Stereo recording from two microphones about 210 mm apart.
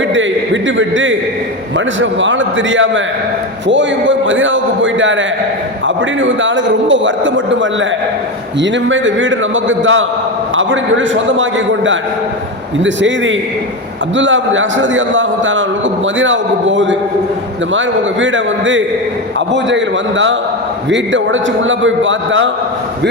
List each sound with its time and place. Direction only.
0.1 s a man's voice: 65° right (ahead or behind)
21.6 s a man's voice: 65° right (ahead or behind)